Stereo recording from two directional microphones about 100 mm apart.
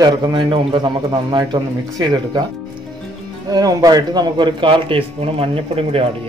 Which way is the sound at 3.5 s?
40° right (ahead or behind).